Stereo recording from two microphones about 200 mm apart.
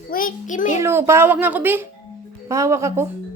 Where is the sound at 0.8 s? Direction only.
15° right (ahead or behind).